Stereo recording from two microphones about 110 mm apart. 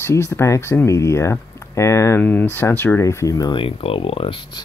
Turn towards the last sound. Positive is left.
turn(degrees=55)  # may be behind; listen again after turning